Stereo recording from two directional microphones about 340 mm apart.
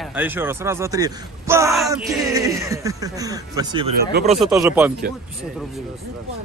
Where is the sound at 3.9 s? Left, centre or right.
Right.